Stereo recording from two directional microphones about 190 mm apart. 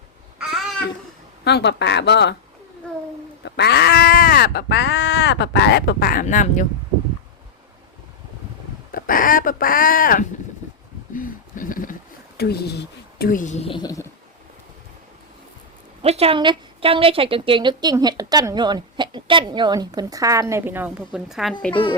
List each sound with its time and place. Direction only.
0.3 s babbling: centre (ahead or behind)
1.5 s speech: 65° left (ahead or behind)
3.4 s speech: 60° left (ahead or behind); by 6.7 s 40° left (ahead or behind)
8.9 s speech: 45° left (ahead or behind)
12.4 s a woman's voice: 55° left (ahead or behind); by 14.1 s 20° left (ahead or behind)
16.0 s a woman's voice: 30° right (ahead or behind); by 21.5 s centre (ahead or behind)